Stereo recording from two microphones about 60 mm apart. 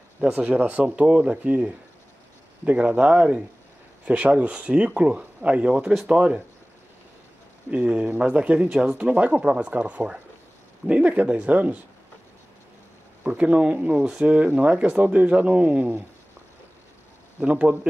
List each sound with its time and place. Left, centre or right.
0.3 s speech: right
7.7 s speech: right
13.2 s speech: right
17.4 s speech: right